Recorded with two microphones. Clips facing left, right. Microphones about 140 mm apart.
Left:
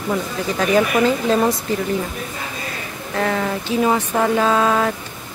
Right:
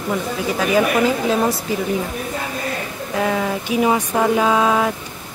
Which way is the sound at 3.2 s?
10° right (ahead or behind).